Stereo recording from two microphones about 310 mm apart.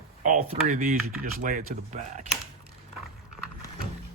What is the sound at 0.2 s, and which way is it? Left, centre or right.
Speech, right.